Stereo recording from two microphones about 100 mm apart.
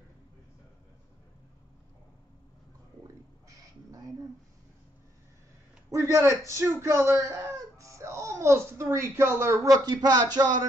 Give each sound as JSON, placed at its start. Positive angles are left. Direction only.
{"t": 3.4, "sound": "crow", "side_deg": -35}
{"t": 5.9, "sound": "speech", "side_deg": -30}